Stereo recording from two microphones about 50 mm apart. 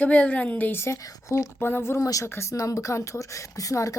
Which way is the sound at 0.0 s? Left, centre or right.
Left.